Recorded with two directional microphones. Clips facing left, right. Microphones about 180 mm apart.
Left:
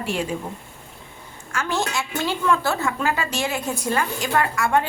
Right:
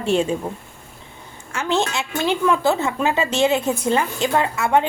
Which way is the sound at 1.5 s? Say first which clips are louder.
Right 3 dB; 25° right (ahead or behind).